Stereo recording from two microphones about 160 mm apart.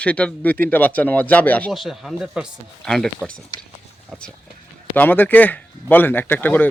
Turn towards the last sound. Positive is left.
turn(degrees=10)  # may be behind; listen again after turning